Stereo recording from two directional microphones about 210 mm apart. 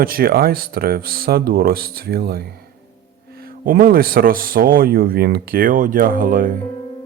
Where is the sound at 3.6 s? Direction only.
45° right (ahead or behind).